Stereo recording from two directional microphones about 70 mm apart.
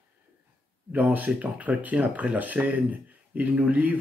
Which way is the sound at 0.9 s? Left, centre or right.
Right.